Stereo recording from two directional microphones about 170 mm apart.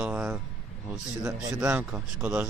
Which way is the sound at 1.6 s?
10° right (ahead or behind).